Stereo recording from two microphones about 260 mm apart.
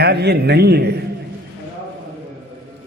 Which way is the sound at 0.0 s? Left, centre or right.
Right.